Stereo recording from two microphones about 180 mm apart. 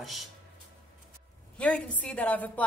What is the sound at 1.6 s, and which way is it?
Speech, 5° left (ahead or behind).